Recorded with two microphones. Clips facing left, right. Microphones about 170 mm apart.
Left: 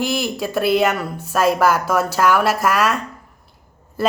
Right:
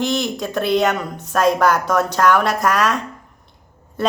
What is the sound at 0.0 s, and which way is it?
A woman's voice, 5° left (ahead or behind).